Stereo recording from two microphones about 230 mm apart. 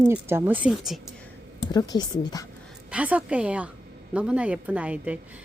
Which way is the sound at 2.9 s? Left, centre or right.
Centre.